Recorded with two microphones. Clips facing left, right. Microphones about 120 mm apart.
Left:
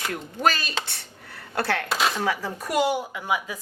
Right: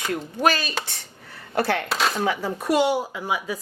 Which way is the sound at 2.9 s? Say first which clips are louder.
Right 1 dB; 35° right (ahead or behind).